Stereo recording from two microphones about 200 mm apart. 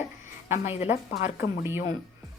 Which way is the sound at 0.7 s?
30° left (ahead or behind).